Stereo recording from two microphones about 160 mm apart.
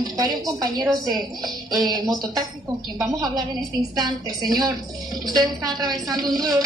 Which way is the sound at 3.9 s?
25° right (ahead or behind).